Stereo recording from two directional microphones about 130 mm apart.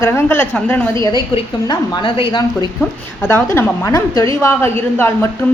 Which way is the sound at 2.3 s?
35° left (ahead or behind).